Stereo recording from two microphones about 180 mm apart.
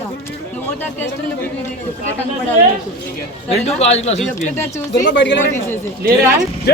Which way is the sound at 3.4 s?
35° left (ahead or behind).